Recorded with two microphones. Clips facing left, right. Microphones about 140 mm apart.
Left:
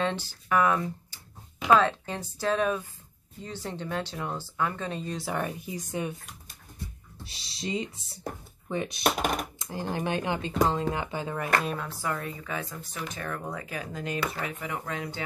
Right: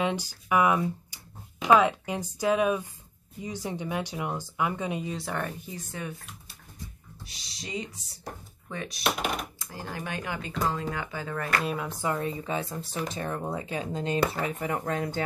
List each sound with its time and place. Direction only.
0.0 s speech: 15° right (ahead or behind)
5.1 s speech: 5° left (ahead or behind)
7.2 s speech: 30° left (ahead or behind)
11.6 s speech: 5° right (ahead or behind)
11.9 s speech: 20° right (ahead or behind)
14.7 s speech: 45° right (ahead or behind)